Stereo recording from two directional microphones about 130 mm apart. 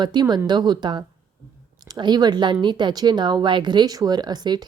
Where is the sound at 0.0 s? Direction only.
35° right (ahead or behind).